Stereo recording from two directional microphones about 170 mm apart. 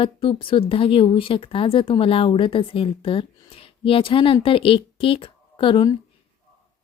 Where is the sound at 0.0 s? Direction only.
30° left (ahead or behind).